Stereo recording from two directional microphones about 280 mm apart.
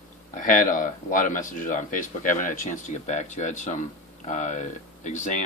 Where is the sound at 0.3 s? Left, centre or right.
Left.